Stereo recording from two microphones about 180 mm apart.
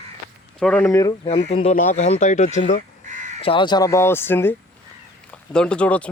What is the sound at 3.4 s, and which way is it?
Speech, 25° left (ahead or behind).